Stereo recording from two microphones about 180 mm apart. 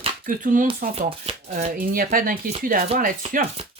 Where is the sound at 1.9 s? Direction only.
55° right (ahead or behind).